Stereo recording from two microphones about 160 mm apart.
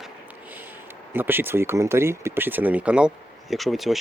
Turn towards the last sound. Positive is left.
turn(degrees=0)  # may be behind; listen again after turning